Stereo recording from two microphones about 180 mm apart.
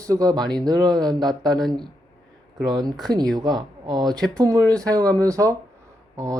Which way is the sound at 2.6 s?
25° right (ahead or behind).